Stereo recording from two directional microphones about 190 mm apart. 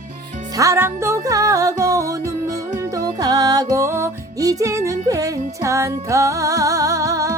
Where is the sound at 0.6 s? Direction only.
15° right (ahead or behind).